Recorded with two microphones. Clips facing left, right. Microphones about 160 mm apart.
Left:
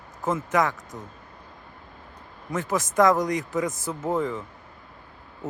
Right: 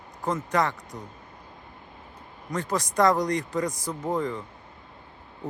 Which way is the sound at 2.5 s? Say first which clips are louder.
Left 2 dB; 5° left (ahead or behind).